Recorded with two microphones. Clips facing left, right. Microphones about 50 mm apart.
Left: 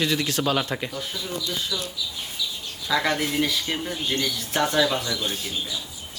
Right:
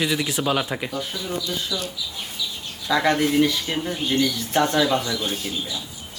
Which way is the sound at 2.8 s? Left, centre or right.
Centre.